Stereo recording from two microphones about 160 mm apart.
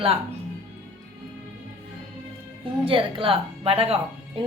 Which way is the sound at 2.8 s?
35° right (ahead or behind).